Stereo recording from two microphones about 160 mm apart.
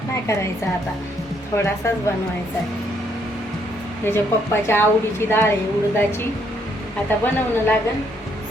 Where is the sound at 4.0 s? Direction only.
15° left (ahead or behind).